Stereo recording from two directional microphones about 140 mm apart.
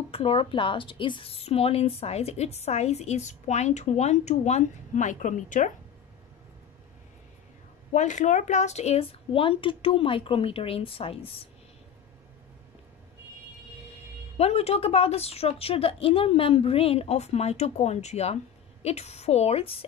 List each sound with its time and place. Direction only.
0.1 s a woman's voice: 45° left (ahead or behind); by 5.7 s 60° left (ahead or behind)
7.9 s a woman's voice: 60° left (ahead or behind); by 11.4 s 45° left (ahead or behind)
14.3 s a woman's voice: 50° left (ahead or behind)